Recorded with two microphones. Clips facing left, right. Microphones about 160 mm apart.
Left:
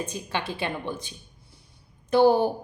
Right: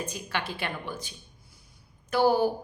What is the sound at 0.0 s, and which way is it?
Speech, 20° left (ahead or behind).